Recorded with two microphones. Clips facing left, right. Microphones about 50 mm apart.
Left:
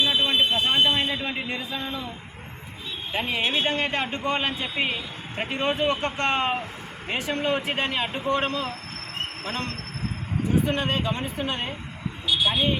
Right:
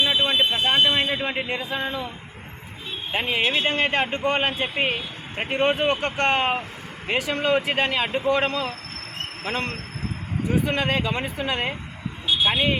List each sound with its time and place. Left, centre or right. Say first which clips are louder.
0.0 s fire alarm: right 1 dB; right
0.7 s speech: right 2 dB; right
3.2 s a man's voice: right 2 dB; right
7.1 s speech: right 4 dB; right
10.8 s speech: right 2 dB; right
12.5 s speech: right 2 dB; right